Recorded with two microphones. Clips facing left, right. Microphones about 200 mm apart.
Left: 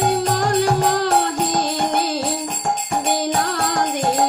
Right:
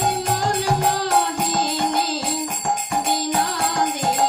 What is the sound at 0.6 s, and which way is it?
Music, 60° left (ahead or behind).